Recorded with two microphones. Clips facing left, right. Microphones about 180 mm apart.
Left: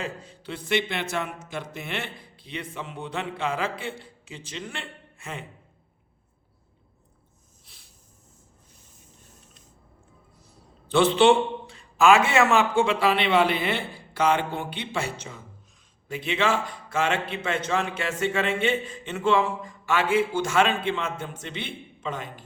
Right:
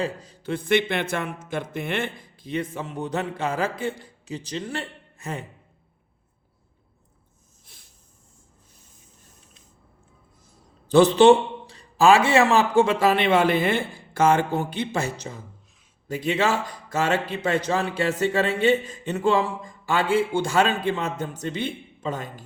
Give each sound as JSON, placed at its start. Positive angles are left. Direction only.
{"t": 0.0, "sound": "a man's voice", "side_deg": -40}
{"t": 10.8, "sound": "a man's voice", "side_deg": -40}